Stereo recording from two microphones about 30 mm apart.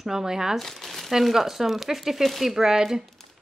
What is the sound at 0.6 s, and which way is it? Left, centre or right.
Speech, centre.